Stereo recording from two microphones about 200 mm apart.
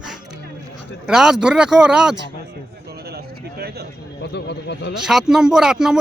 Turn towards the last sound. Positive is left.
turn(degrees=-5)  # may be behind; listen again after turning